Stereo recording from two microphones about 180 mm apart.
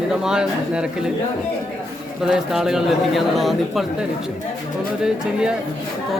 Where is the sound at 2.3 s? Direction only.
Centre (ahead or behind).